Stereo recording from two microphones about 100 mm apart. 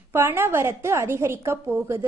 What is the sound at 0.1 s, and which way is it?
A woman's voice, 25° right (ahead or behind).